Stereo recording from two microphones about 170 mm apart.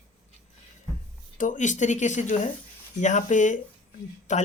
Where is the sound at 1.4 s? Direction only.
45° left (ahead or behind).